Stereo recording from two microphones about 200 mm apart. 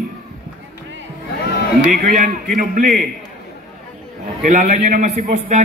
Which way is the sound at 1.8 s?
40° right (ahead or behind).